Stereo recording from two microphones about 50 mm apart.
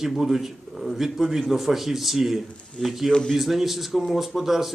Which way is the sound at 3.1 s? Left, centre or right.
Centre.